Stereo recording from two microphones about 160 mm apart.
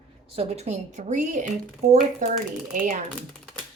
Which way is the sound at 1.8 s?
70° right (ahead or behind).